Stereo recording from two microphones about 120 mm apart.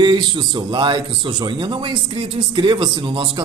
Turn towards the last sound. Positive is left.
turn(degrees=-40)  # may be behind; listen again after turning